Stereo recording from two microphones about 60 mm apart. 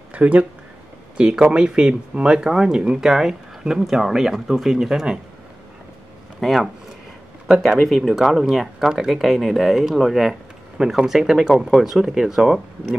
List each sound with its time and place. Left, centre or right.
0.1 s speech: right; by 5.2 s centre
6.4 s speech: centre
7.8 s speech: centre